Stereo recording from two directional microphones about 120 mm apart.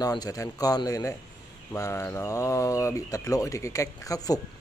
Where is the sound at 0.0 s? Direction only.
35° left (ahead or behind).